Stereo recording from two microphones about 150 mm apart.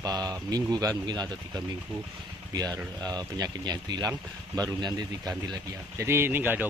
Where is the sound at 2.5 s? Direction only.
25° right (ahead or behind).